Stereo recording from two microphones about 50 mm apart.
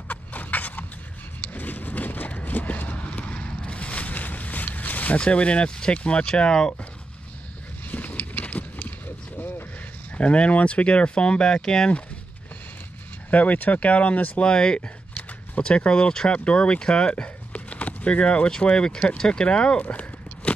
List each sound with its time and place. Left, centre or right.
0.1 s a sound: left
5.2 s speech: left
7.9 s vehicle: left
10.1 s speech: left
13.3 s speech: left
14.3 s speech: centre